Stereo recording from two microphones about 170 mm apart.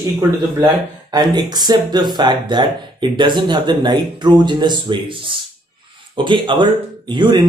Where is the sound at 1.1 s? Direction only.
25° right (ahead or behind).